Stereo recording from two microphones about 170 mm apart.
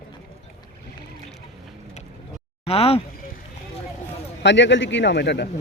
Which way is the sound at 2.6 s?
35° left (ahead or behind).